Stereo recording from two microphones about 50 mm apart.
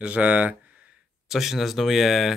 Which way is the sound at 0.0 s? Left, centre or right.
Right.